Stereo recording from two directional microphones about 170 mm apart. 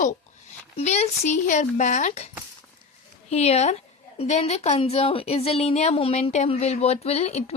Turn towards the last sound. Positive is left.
turn(degrees=40)  # may be behind; listen again after turning